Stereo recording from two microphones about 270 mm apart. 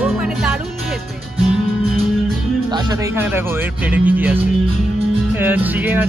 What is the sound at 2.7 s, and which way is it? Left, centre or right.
Speech, centre.